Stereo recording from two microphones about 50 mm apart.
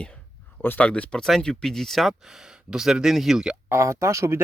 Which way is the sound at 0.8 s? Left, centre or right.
Left.